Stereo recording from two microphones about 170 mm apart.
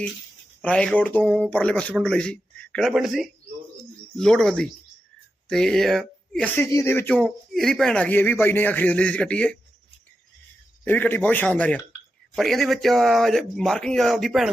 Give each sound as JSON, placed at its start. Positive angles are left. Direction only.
{"t": 0.6, "sound": "speech", "side_deg": 5}
{"t": 6.6, "sound": "speech", "side_deg": 15}
{"t": 10.8, "sound": "speech", "side_deg": 10}